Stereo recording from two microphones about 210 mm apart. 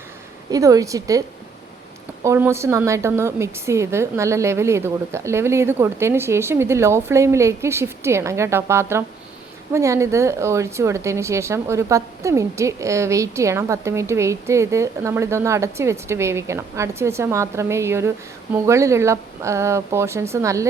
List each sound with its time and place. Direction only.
0.5 s speech: 15° right (ahead or behind)
2.2 s speech: 15° right (ahead or behind)